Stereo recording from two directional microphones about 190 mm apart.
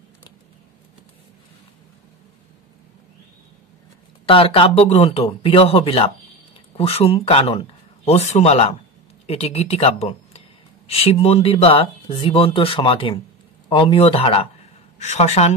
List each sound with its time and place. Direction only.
4.3 s speech: 30° left (ahead or behind)